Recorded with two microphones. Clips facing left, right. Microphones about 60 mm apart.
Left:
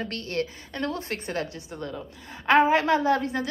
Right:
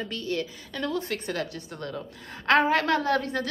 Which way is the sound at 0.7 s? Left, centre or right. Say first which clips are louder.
Right 1 dB; left.